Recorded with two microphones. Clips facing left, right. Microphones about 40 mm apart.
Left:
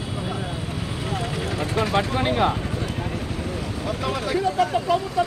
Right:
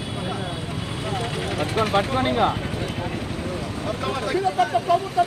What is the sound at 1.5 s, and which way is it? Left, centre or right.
Vehicle, right.